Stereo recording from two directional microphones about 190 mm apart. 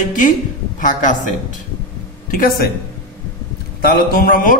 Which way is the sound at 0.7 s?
45° left (ahead or behind).